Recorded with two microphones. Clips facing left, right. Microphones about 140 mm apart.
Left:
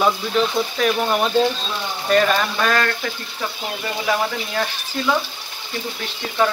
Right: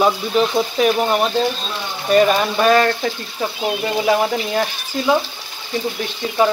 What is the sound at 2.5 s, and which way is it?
Speech, 25° right (ahead or behind).